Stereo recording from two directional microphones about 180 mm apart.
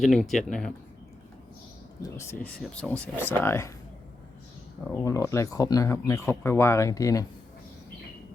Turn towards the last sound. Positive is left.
turn(degrees=20)  # may be behind; listen again after turning